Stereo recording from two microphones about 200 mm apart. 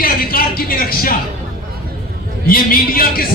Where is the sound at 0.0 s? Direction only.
45° left (ahead or behind).